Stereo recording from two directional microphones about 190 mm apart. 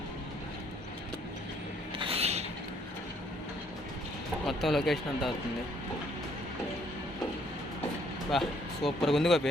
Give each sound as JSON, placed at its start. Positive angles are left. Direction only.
{"t": 2.0, "sound": "a sound", "side_deg": -30}
{"t": 4.4, "sound": "speech", "side_deg": 0}
{"t": 8.3, "sound": "speech", "side_deg": 0}